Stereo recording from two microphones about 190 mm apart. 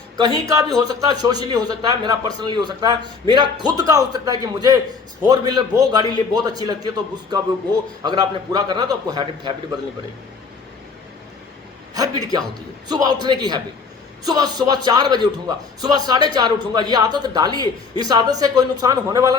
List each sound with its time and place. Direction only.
0.2 s a man's voice: 20° right (ahead or behind)
11.9 s a man's voice: 20° right (ahead or behind)